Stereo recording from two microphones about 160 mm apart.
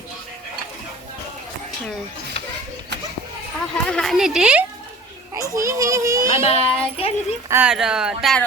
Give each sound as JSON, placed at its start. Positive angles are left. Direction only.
{"t": 3.8, "sound": "speech", "side_deg": 5}
{"t": 5.4, "sound": "a child's voice", "side_deg": -20}
{"t": 6.3, "sound": "a child's voice", "side_deg": 40}
{"t": 7.4, "sound": "speech", "side_deg": -15}
{"t": 7.7, "sound": "speech", "side_deg": -5}